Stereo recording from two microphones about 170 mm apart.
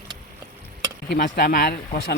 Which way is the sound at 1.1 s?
60° left (ahead or behind).